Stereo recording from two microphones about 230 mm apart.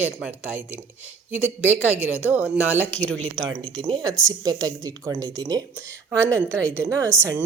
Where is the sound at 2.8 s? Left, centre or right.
Centre.